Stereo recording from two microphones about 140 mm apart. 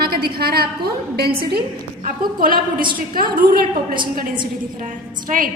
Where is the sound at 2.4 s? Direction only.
90° right.